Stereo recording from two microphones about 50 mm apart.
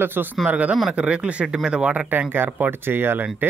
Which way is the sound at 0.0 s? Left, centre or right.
Right.